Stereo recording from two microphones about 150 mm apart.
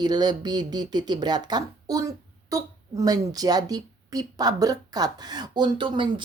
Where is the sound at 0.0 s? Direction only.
30° right (ahead or behind).